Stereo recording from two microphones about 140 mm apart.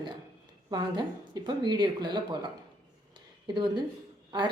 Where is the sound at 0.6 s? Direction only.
30° right (ahead or behind).